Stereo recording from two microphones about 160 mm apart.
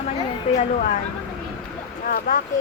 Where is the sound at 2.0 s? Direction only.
60° left (ahead or behind).